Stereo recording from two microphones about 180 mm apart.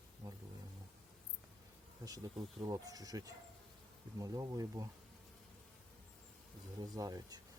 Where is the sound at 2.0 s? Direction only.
20° right (ahead or behind).